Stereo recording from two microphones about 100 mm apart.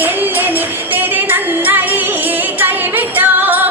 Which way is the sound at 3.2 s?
20° right (ahead or behind).